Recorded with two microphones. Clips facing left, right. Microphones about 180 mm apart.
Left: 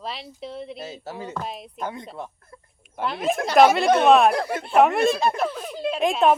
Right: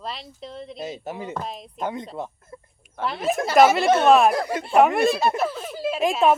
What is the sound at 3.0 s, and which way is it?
A woman's voice, centre (ahead or behind).